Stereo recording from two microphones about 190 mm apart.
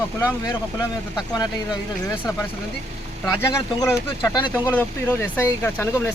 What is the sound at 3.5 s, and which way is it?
Speech, 15° left (ahead or behind).